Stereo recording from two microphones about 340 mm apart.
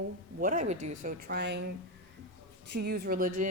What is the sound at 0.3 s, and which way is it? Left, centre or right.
Speech, right.